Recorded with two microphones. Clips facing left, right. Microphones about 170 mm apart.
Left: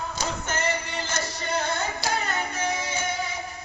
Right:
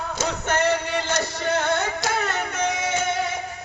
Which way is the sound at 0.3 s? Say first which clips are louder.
Right 7 dB; 70° right (ahead or behind).